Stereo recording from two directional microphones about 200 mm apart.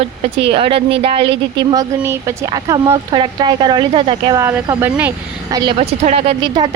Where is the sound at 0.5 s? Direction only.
25° right (ahead or behind); by 5.1 s 10° right (ahead or behind).